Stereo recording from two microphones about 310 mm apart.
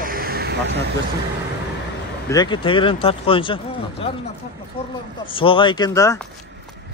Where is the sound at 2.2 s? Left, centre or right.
Centre.